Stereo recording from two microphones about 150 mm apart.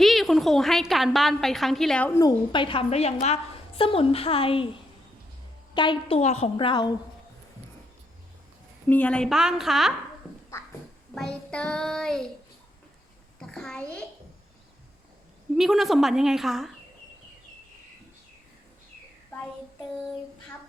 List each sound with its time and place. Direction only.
0.0 s a woman's voice: centre (ahead or behind)
2.1 s a woman's voice: 30° left (ahead or behind)
8.9 s a woman's voice: 10° left (ahead or behind)
11.1 s a woman's voice: 5° left (ahead or behind)
13.4 s a child's voice: 5° left (ahead or behind)
15.5 s a woman's voice: centre (ahead or behind)